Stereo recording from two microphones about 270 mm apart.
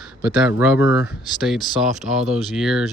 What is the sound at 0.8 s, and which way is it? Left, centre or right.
Speech, left.